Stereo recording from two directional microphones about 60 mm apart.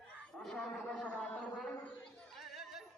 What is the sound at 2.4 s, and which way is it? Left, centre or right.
Music, centre.